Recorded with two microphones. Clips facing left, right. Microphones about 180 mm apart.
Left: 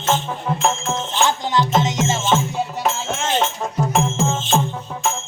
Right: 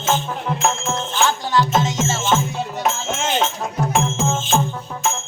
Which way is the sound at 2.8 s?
5° right (ahead or behind).